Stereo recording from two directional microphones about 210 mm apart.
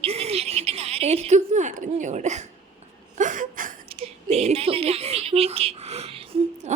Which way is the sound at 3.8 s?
30° right (ahead or behind).